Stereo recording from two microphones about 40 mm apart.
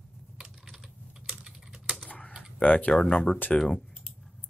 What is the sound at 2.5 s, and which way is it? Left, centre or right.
Speech, left.